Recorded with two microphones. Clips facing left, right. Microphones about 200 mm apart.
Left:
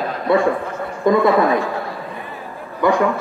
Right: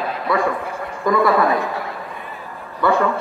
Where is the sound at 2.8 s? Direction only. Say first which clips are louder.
Left 1 dB; 15° left (ahead or behind).